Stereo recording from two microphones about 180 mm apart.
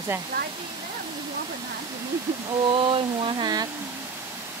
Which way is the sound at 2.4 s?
30° right (ahead or behind).